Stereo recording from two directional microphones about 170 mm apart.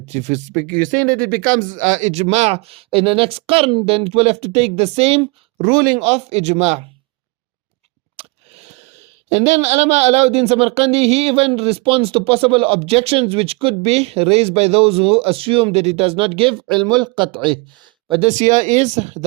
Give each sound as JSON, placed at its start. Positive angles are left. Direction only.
{"t": 0.0, "sound": "speech", "side_deg": -40}
{"t": 0.5, "sound": "speech", "side_deg": 10}
{"t": 1.6, "sound": "speech", "side_deg": -50}
{"t": 8.1, "sound": "a sound", "side_deg": -35}
{"t": 9.3, "sound": "speech", "side_deg": -40}